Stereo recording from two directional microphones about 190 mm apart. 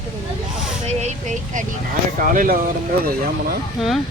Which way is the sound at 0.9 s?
35° right (ahead or behind).